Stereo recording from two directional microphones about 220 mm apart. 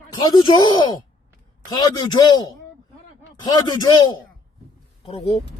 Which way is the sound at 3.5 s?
20° left (ahead or behind).